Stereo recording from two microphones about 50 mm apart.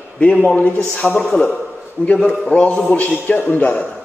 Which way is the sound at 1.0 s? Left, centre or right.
Centre.